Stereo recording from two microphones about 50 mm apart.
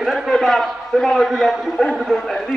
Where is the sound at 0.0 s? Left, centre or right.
Centre.